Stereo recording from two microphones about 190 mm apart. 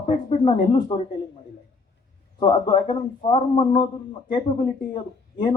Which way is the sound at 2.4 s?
25° left (ahead or behind).